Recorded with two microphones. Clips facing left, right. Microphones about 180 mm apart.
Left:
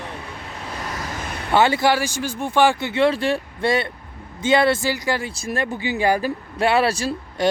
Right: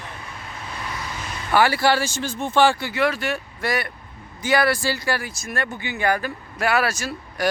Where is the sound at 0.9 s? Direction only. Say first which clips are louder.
Left 3 dB; 45° left (ahead or behind).